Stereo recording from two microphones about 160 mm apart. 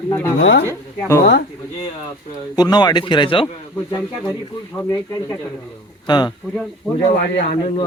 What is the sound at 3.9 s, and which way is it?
A man's voice, 20° left (ahead or behind).